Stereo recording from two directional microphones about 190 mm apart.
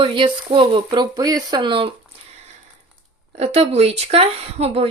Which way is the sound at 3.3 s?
35° right (ahead or behind).